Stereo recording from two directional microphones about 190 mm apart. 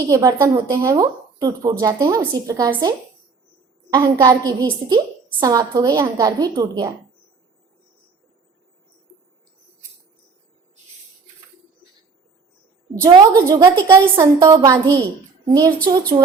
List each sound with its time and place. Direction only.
0.1 s a woman's voice: 15° right (ahead or behind)
3.9 s a woman's voice: 20° right (ahead or behind)
12.9 s a woman's voice: 20° right (ahead or behind)